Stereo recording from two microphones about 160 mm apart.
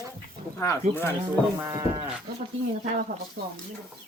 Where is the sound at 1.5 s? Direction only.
20° right (ahead or behind).